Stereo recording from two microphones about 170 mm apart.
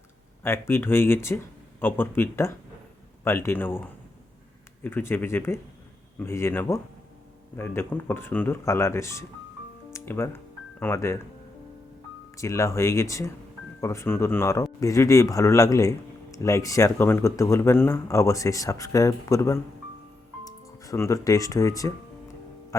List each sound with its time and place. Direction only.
0.4 s speech: 15° left (ahead or behind)
12.4 s speech: 15° left (ahead or behind)